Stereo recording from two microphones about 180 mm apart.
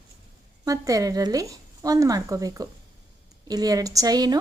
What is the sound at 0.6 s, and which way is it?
A woman's voice, 20° right (ahead or behind).